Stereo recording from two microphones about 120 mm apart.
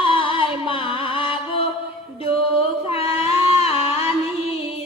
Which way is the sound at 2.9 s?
50° left (ahead or behind).